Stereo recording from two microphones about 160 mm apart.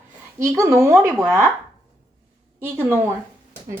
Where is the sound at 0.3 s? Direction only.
20° right (ahead or behind).